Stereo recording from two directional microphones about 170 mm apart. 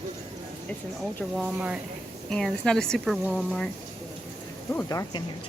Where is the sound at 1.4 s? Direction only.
5° right (ahead or behind).